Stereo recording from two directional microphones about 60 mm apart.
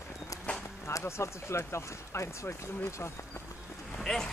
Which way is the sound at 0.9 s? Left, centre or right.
Left.